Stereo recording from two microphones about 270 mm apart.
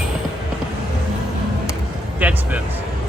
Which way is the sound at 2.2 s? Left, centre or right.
Centre.